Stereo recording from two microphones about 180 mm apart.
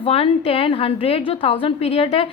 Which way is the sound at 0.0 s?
35° left (ahead or behind).